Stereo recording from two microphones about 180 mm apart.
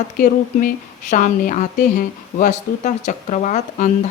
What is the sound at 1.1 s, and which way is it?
Speech, 45° left (ahead or behind).